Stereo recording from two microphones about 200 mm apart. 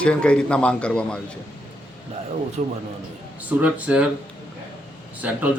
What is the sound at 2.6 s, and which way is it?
Speech, 40° right (ahead or behind).